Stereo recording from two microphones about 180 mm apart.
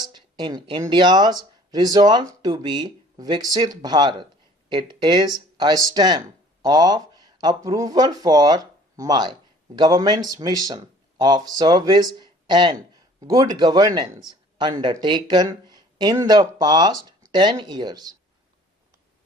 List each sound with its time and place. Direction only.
0.0 s speech: 25° right (ahead or behind)